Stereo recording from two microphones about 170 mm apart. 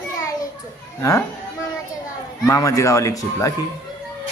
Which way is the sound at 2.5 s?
20° left (ahead or behind).